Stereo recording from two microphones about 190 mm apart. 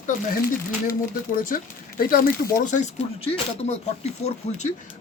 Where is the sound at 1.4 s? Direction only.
45° left (ahead or behind).